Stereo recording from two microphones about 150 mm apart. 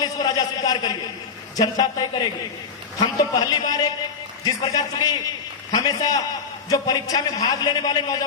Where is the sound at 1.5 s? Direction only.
25° left (ahead or behind).